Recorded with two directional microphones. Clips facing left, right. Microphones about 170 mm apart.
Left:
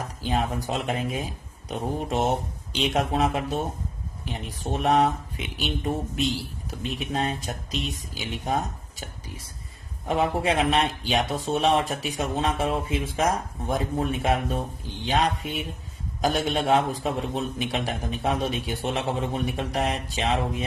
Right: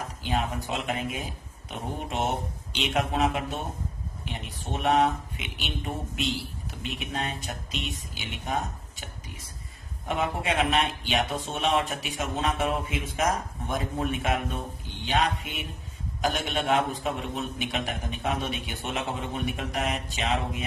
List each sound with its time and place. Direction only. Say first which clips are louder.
0.2 s speech: left 3 dB; 40° left (ahead or behind)
10.1 s speech: left 5 dB; 35° left (ahead or behind)